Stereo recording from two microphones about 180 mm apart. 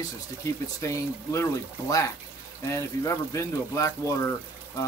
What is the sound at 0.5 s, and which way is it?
Speech, 20° left (ahead or behind).